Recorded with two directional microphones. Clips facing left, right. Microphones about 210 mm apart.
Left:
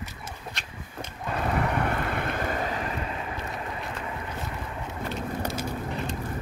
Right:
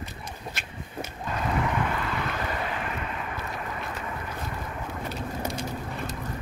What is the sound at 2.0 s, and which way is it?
Vehicle, 55° left (ahead or behind).